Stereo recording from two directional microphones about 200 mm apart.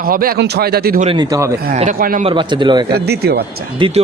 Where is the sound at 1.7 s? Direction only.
40° right (ahead or behind).